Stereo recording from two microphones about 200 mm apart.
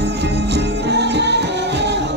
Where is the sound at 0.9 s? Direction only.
60° right (ahead or behind).